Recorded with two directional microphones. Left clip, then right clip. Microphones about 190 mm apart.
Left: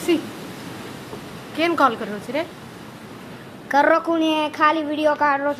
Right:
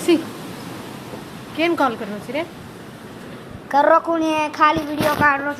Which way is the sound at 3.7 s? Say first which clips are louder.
Right 2 dB; 15° left (ahead or behind).